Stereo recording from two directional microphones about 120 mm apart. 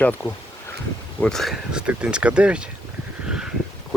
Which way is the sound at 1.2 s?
5° left (ahead or behind).